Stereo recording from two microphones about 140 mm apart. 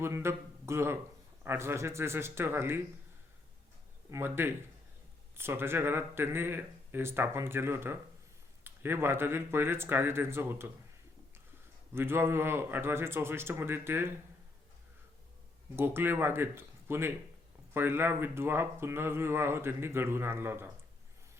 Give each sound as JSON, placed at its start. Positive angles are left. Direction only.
{"t": 0.0, "sound": "speech", "side_deg": -20}
{"t": 4.1, "sound": "speech", "side_deg": -15}
{"t": 11.9, "sound": "speech", "side_deg": -15}
{"t": 15.7, "sound": "speech", "side_deg": -15}